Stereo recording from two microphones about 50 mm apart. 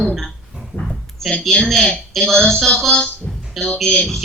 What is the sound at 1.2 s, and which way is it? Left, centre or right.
Speech, centre.